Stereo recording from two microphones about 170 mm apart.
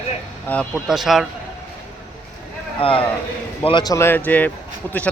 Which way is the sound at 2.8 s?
30° left (ahead or behind).